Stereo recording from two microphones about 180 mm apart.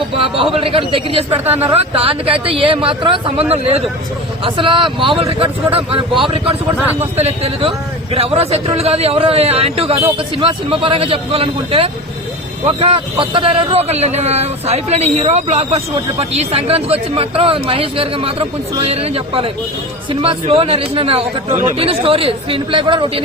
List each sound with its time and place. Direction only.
0.2 s a man's voice: 30° right (ahead or behind)